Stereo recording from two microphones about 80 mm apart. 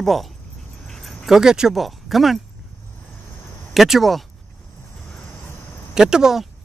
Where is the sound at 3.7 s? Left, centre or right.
Centre.